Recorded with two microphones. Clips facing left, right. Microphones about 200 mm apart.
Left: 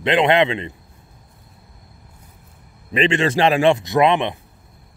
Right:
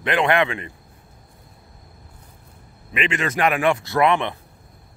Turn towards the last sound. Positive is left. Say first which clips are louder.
# left 3 dB
turn(degrees=20)  # may be behind; listen again after turning